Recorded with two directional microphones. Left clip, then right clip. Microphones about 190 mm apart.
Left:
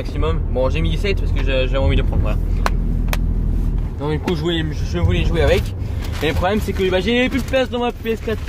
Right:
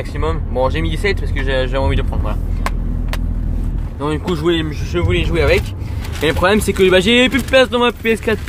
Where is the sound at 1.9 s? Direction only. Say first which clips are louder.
Right 1 dB; 5° right (ahead or behind).